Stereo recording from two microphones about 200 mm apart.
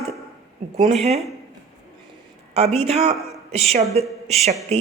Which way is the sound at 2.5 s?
30° right (ahead or behind).